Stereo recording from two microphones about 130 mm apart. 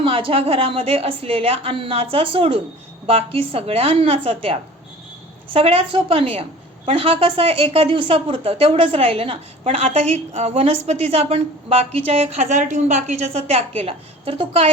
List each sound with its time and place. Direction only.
0.0 s a woman's voice: 45° right (ahead or behind)